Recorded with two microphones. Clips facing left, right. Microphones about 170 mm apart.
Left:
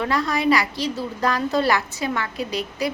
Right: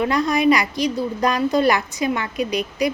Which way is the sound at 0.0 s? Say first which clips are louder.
Right 4 dB; 15° right (ahead or behind).